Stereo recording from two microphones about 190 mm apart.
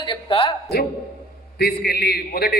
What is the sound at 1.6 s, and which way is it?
A man's voice, 55° left (ahead or behind).